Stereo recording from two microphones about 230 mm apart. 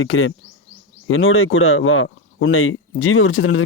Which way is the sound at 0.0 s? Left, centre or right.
Left.